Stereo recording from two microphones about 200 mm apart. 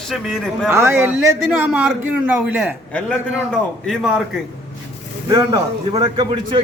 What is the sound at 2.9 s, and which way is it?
A man's voice, 5° left (ahead or behind).